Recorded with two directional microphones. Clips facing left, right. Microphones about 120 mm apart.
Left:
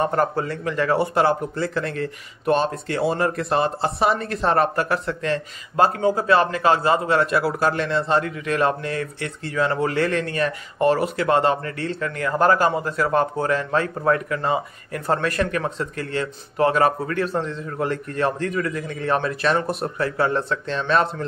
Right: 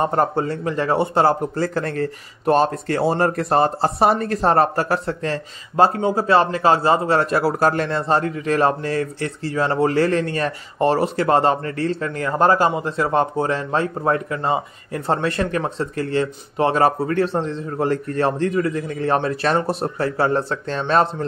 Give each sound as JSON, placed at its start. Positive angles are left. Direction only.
{"t": 0.0, "sound": "a man's voice", "side_deg": -30}